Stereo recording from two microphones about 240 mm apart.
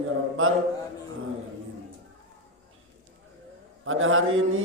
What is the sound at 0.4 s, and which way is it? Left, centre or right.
Speech, right.